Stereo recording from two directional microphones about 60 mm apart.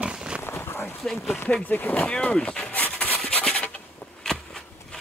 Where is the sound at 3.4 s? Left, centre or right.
Left.